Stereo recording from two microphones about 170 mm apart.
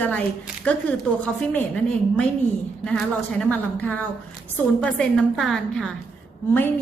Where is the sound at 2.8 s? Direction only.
5° left (ahead or behind).